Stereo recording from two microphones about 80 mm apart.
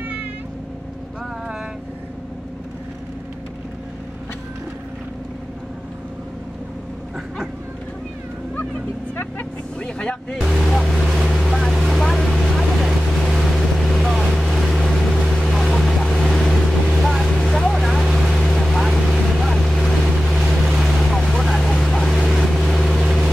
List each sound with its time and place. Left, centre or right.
9.1 s vehicle: left
9.8 s vehicle: centre
10.4 s boat: centre
21.1 s vehicle: centre